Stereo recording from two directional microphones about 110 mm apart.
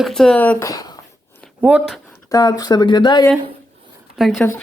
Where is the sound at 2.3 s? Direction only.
35° left (ahead or behind).